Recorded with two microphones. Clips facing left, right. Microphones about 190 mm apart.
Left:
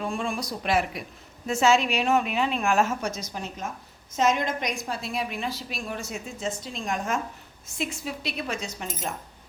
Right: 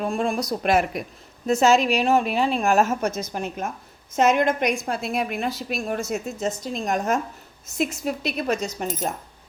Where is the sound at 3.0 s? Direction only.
55° right (ahead or behind).